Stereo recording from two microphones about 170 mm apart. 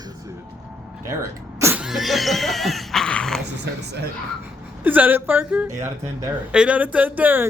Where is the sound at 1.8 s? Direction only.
Centre (ahead or behind).